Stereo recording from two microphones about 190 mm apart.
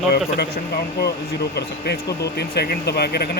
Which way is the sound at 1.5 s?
60° left (ahead or behind).